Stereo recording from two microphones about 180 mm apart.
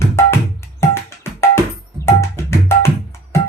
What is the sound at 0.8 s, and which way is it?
Music, 15° left (ahead or behind).